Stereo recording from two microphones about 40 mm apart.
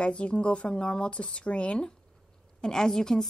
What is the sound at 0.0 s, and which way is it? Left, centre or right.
Speech, left.